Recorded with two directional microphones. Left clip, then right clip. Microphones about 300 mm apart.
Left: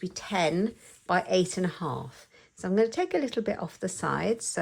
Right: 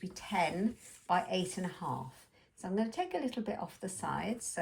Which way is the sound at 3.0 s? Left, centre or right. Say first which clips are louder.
Left 8 dB; left.